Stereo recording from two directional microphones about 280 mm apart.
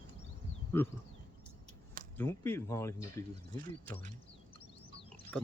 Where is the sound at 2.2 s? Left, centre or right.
Centre.